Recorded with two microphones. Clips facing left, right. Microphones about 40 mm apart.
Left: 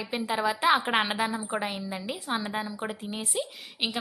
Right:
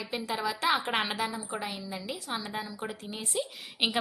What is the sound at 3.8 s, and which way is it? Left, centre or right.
Speech, centre.